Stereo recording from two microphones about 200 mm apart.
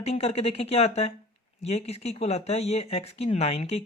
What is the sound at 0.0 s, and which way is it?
Speech, 30° left (ahead or behind).